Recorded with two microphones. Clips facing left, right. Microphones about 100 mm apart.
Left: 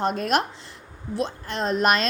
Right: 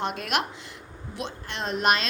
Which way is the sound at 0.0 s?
40° left (ahead or behind).